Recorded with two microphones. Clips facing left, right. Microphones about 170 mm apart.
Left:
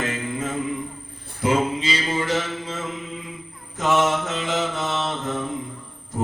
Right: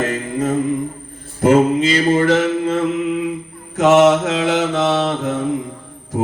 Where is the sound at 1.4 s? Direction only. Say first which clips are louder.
Right 9 dB; 50° right (ahead or behind).